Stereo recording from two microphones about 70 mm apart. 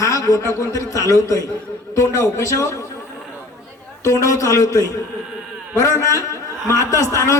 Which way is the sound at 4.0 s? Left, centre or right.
Left.